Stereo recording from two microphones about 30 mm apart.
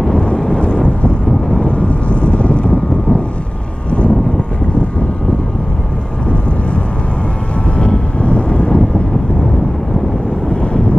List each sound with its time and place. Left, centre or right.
0.1 s vehicle: left
3.9 s wind noise: left
7.7 s vehicle: left
10.5 s wind noise: left